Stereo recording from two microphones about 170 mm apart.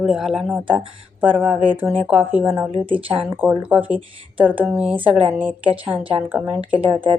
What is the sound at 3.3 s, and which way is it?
A woman's voice, 10° right (ahead or behind).